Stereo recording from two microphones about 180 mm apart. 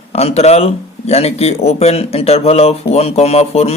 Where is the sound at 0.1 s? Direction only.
35° left (ahead or behind).